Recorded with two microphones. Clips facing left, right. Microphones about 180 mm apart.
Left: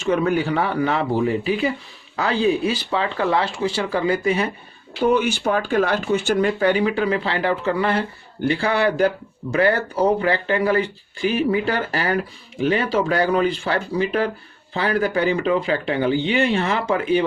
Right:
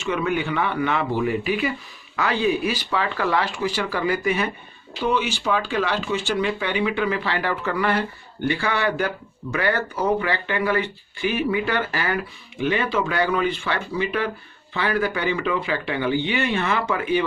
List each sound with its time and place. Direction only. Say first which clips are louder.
0.0 s speech: left 4 dB; 40° left (ahead or behind)
4.9 s speech: left 5 dB; 50° left (ahead or behind); by 17.2 s 30° left (ahead or behind)